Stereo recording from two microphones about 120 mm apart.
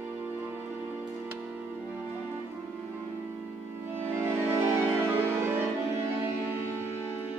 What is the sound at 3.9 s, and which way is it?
Music, 20° right (ahead or behind).